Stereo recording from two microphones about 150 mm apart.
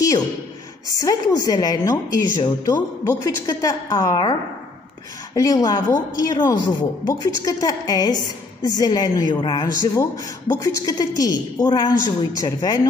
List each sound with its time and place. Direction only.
0.9 s a woman's voice: 25° left (ahead or behind)